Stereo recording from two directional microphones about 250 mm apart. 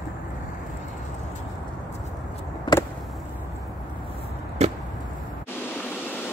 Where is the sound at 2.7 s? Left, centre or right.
Centre.